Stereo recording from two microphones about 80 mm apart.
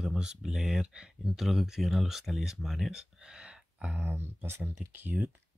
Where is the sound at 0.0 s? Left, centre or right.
Centre.